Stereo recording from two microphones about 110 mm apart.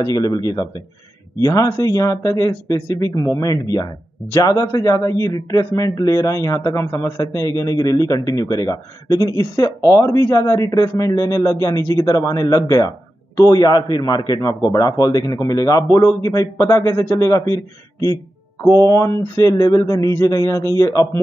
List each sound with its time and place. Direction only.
0.0 s a man's voice: 35° left (ahead or behind)
18.7 s a man's voice: 30° left (ahead or behind)